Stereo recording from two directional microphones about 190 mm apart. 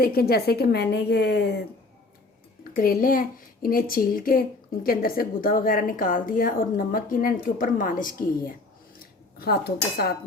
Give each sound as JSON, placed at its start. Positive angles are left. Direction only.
{"t": 0.0, "sound": "a woman's voice", "side_deg": 55}
{"t": 2.7, "sound": "a child's voice", "side_deg": 50}
{"t": 9.4, "sound": "a woman's voice", "side_deg": 55}